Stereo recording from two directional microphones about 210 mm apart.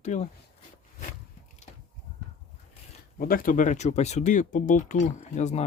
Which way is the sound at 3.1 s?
45° left (ahead or behind).